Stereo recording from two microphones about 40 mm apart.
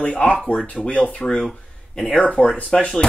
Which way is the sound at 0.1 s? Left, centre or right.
Left.